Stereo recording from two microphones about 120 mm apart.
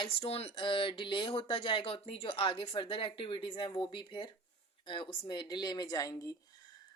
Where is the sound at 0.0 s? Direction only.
50° left (ahead or behind).